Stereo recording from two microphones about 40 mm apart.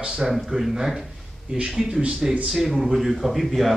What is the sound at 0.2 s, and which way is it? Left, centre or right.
Speech, centre.